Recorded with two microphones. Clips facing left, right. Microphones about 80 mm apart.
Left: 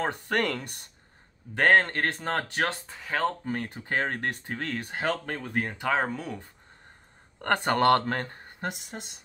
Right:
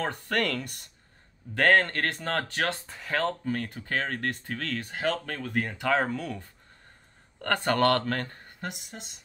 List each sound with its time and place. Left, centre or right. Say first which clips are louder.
0.0 s speech: left 1 dB; left
2.9 s speech: right 1 dB; centre
3.4 s speech: right 1 dB; left
7.4 s speech: left 2 dB; left